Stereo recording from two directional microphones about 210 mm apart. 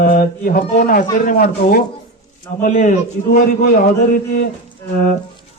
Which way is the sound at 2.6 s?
40° left (ahead or behind).